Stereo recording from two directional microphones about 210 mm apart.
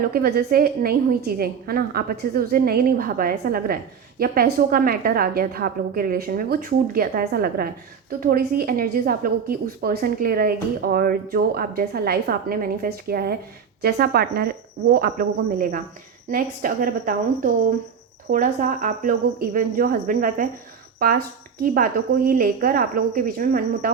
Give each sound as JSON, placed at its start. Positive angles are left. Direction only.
{"t": 0.0, "sound": "a woman's voice", "side_deg": -45}